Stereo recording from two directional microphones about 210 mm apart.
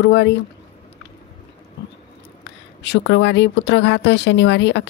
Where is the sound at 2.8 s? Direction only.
55° left (ahead or behind).